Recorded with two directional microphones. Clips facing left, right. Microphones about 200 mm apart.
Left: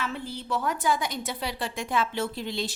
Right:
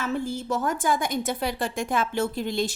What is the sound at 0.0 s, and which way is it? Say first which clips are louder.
A woman's voice: right 6 dB; 45° right (ahead or behind).